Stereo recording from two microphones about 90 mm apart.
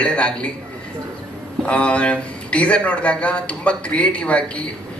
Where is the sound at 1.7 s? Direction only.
15° left (ahead or behind).